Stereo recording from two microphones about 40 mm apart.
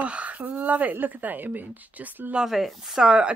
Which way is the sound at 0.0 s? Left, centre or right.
Right.